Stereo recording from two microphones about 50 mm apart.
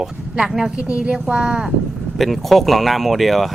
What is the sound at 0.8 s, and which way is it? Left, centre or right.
Speech, right.